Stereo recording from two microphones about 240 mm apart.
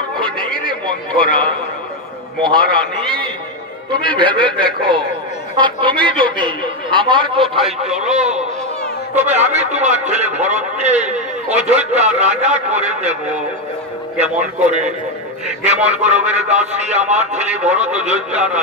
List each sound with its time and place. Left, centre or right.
1.2 s a man's voice: left
3.9 s a man's voice: right
14.1 s a man's voice: right
18.3 s speech: centre